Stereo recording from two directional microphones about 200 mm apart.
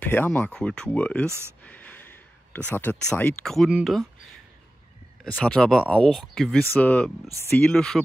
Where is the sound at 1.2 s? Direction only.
15° right (ahead or behind).